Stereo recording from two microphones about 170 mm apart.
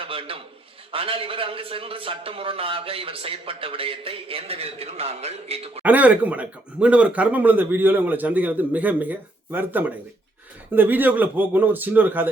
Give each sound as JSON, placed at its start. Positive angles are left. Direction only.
{"t": 0.0, "sound": "a sound", "side_deg": -30}
{"t": 0.9, "sound": "a man's voice", "side_deg": -35}
{"t": 5.8, "sound": "speech", "side_deg": -10}